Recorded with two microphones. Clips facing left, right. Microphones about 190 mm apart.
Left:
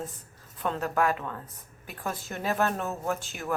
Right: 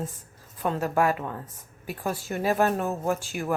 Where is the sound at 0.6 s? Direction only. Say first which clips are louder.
Right 3 dB; 10° right (ahead or behind).